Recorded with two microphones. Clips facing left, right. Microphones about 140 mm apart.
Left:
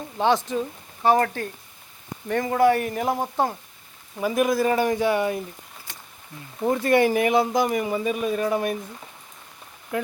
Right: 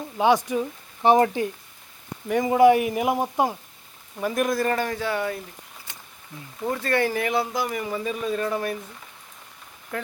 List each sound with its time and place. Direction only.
0.2 s speech: 10° right (ahead or behind)
4.2 s speech: 5° left (ahead or behind)
6.6 s speech: 15° left (ahead or behind)
9.9 s speech: 15° left (ahead or behind)